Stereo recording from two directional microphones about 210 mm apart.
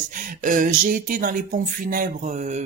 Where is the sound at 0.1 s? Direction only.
40° right (ahead or behind).